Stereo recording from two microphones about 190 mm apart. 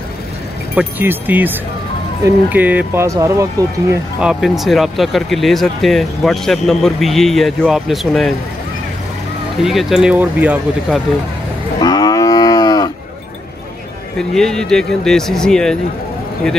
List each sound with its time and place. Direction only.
0.7 s speech: 10° right (ahead or behind)
4.2 s speech: 5° right (ahead or behind)
9.6 s speech: centre (ahead or behind)
11.8 s moo: 20° left (ahead or behind)
14.1 s speech: 5° left (ahead or behind)